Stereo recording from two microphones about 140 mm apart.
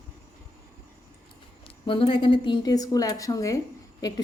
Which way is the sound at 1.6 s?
40° left (ahead or behind).